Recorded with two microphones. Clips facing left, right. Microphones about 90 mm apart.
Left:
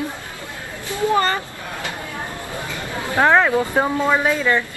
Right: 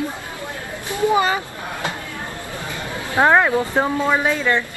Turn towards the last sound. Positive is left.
turn(degrees=10)  # may be behind; listen again after turning